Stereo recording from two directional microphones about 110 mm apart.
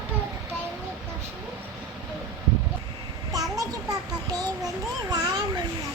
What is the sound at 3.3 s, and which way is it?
Child singing, 35° right (ahead or behind).